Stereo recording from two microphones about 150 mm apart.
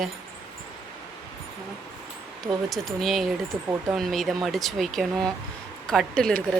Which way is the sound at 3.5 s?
20° right (ahead or behind).